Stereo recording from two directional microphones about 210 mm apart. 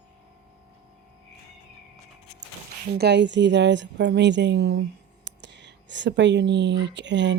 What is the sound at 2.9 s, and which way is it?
Speech, 55° right (ahead or behind).